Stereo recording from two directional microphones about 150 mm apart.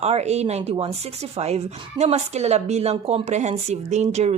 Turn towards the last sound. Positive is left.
turn(degrees=-50)  # may be behind; listen again after turning